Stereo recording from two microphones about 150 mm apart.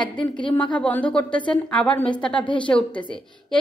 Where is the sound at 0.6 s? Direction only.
10° left (ahead or behind).